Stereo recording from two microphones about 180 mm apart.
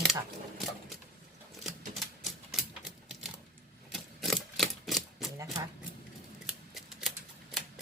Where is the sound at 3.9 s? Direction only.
Centre (ahead or behind).